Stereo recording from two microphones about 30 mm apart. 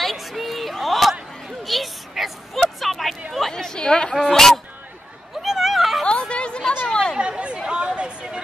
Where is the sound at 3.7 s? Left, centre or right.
Left.